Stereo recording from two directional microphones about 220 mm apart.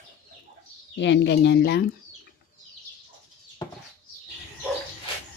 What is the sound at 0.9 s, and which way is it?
Speech, 55° left (ahead or behind).